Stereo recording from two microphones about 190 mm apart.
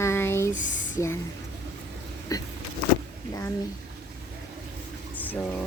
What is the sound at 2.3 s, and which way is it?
Speech, 15° left (ahead or behind).